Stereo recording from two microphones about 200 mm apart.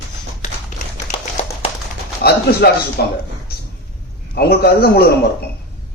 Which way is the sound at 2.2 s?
50° left (ahead or behind).